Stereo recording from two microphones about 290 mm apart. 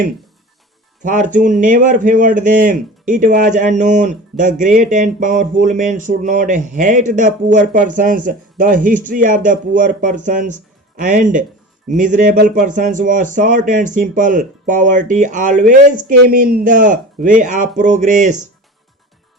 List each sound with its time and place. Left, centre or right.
1.0 s a man's voice: right